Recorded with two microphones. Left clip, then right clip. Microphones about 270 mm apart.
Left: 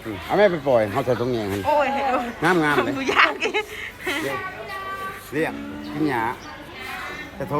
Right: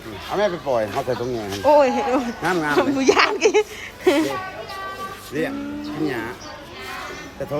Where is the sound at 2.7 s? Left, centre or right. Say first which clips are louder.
Right 2 dB; centre.